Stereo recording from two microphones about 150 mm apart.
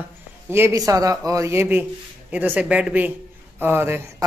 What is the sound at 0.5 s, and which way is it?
Speech, 20° right (ahead or behind).